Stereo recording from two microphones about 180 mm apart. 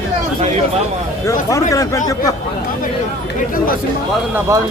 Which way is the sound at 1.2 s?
15° left (ahead or behind).